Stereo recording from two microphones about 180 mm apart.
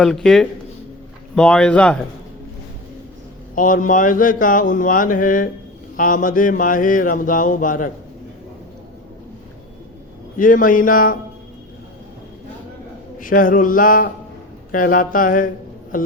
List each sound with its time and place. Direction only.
0.0 s speech: centre (ahead or behind)
3.5 s speech: 50° left (ahead or behind)
10.3 s speech: 50° left (ahead or behind)
13.1 s speech: 50° left (ahead or behind)